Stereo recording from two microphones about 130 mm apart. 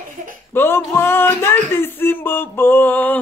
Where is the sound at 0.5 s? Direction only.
15° left (ahead or behind).